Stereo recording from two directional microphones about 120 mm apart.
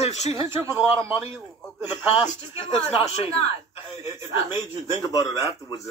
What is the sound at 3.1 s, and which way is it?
Speech, 65° left (ahead or behind).